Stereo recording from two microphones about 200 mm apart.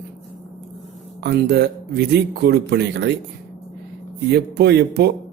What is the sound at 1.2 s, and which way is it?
Speech, 55° right (ahead or behind).